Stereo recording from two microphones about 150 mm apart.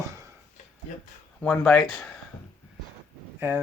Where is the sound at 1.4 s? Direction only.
10° left (ahead or behind).